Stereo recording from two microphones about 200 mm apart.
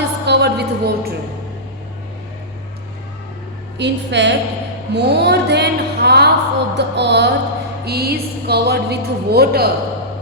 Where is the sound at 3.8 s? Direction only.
60° right (ahead or behind).